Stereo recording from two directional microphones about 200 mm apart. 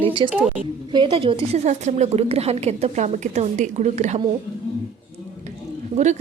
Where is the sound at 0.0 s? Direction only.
25° right (ahead or behind).